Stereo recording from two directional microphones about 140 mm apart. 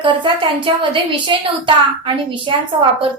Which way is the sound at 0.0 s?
35° right (ahead or behind).